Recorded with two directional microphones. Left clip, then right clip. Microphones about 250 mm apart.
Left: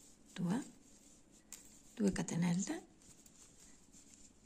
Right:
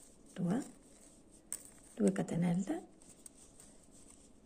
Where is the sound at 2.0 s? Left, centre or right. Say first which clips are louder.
Right 4 dB; left.